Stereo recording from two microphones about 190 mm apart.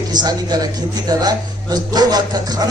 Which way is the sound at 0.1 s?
20° right (ahead or behind).